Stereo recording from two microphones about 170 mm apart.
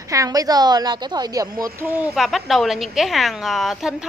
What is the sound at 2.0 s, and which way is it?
A woman's voice, centre (ahead or behind).